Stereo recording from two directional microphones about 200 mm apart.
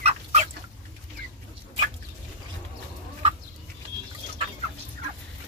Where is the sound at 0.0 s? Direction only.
30° right (ahead or behind).